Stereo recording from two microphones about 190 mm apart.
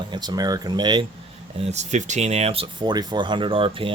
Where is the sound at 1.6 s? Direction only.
35° right (ahead or behind).